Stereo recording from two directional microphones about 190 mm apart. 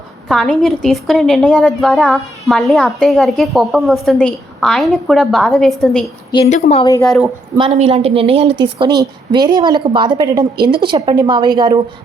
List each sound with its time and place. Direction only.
0.3 s a woman's voice: centre (ahead or behind)
6.3 s a woman's voice: 25° left (ahead or behind)
7.6 s a woman's voice: 35° right (ahead or behind)